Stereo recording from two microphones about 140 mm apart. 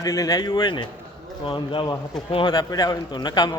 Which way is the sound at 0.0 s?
25° left (ahead or behind).